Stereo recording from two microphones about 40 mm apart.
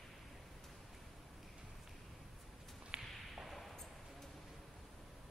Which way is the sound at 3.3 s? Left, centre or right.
Centre.